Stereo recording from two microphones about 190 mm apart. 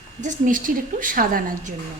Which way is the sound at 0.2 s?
40° right (ahead or behind).